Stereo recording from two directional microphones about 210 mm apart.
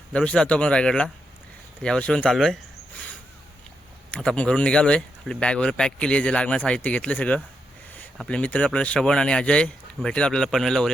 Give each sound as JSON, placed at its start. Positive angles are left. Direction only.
{"t": 0.1, "sound": "speech", "side_deg": 5}
{"t": 4.1, "sound": "speech", "side_deg": 5}